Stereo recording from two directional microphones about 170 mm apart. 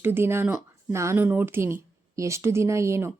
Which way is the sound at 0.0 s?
15° right (ahead or behind).